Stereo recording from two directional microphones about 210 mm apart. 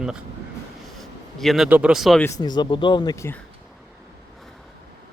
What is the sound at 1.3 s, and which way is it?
Speech, centre (ahead or behind).